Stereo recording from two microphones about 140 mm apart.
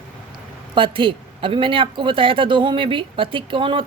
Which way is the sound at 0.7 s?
40° right (ahead or behind).